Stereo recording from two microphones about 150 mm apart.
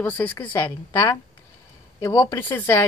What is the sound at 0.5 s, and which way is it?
A woman's voice, 25° left (ahead or behind).